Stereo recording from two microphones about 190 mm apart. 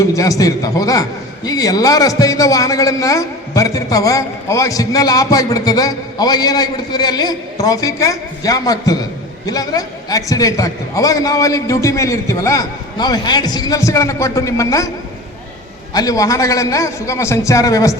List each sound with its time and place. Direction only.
0.1 s a man's voice: 15° left (ahead or behind)
16.0 s a man's voice: 20° left (ahead or behind)